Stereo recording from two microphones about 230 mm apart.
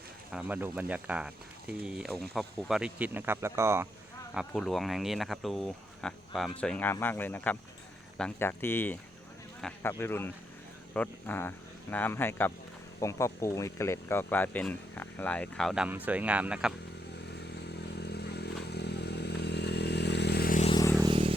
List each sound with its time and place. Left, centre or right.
0.3 s speech: centre
4.4 s speech: centre
17.4 s motorcycle: left
20.7 s vehicle: centre
21.0 s vehicle: right